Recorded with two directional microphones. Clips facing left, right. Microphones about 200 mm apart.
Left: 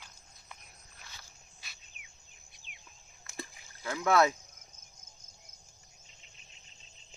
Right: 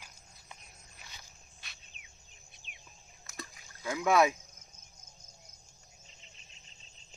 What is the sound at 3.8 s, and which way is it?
Speech, 15° right (ahead or behind).